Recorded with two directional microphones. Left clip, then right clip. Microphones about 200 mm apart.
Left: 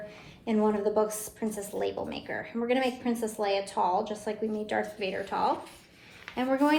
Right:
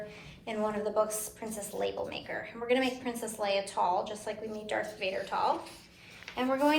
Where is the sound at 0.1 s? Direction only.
45° left (ahead or behind).